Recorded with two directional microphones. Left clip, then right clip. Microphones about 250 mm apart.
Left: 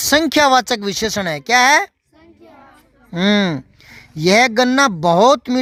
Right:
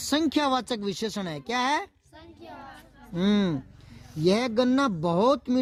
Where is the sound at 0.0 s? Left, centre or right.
Left.